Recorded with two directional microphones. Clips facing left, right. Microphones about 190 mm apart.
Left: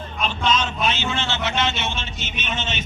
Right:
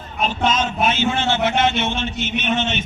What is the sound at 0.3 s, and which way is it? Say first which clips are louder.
A man's voice: right 2 dB; 45° right (ahead or behind).